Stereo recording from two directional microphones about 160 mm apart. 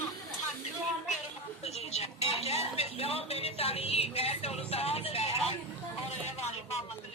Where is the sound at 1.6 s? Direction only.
40° left (ahead or behind).